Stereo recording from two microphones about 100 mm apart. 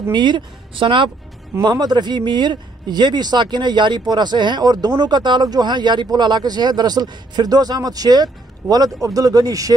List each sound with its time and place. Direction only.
0.1 s speech: 50° right (ahead or behind)
1.6 s speech: 45° right (ahead or behind)